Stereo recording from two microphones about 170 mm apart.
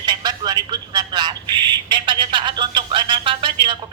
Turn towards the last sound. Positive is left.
turn(degrees=-30)  # may be behind; listen again after turning